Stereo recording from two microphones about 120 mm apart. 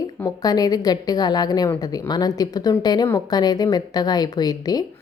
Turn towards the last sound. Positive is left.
turn(degrees=35)  # may be behind; listen again after turning